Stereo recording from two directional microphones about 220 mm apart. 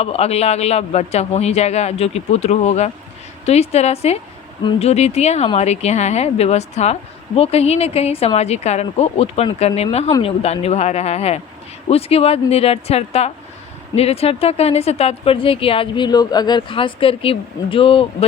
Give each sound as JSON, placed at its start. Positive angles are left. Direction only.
{"t": 0.0, "sound": "speech", "side_deg": 25}